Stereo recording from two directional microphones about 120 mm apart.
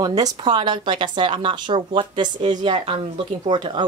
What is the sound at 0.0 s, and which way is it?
Speech, 35° right (ahead or behind).